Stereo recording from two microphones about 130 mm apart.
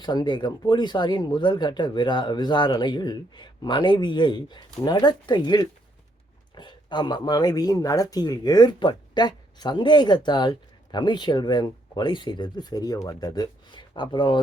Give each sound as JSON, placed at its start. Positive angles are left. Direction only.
{"t": 0.0, "sound": "speech", "side_deg": 35}